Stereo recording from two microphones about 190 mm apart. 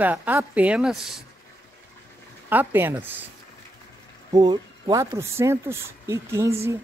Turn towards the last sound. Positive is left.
turn(degrees=-15)  # may be behind; listen again after turning